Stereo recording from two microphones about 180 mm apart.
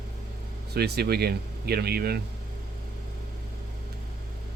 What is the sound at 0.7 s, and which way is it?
Speech, 60° right (ahead or behind).